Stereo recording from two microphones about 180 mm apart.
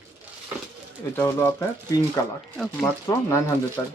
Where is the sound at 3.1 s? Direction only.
20° left (ahead or behind).